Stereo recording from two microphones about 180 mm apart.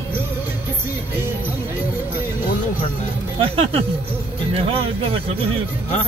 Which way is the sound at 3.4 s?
30° right (ahead or behind).